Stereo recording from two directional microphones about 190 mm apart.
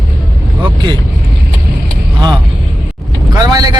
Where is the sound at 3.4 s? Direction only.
20° right (ahead or behind).